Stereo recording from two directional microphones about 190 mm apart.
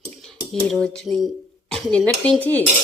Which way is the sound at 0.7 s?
Centre (ahead or behind).